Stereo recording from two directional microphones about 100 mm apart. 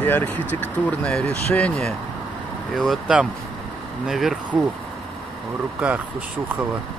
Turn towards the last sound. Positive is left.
turn(degrees=-10)  # may be behind; listen again after turning